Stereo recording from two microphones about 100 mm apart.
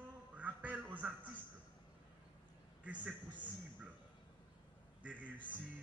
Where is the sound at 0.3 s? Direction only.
15° right (ahead or behind).